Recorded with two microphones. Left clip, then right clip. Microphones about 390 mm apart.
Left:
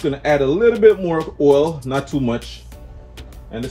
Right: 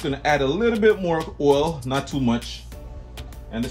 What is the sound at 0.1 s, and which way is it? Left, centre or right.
Speech, right.